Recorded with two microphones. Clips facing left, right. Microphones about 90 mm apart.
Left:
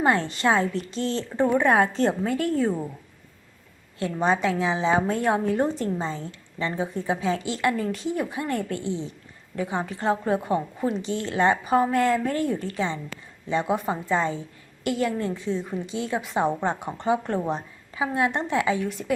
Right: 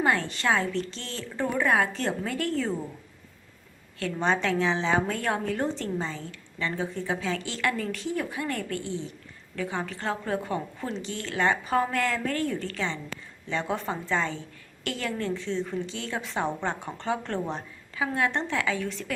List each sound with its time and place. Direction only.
0.0 s a woman's voice: 25° left (ahead or behind)
4.0 s a woman's voice: 10° left (ahead or behind)